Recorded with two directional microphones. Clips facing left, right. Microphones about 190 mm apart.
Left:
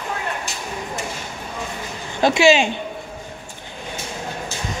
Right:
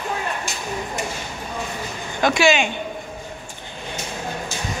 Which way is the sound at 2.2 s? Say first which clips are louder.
Left 3 dB; 25° left (ahead or behind).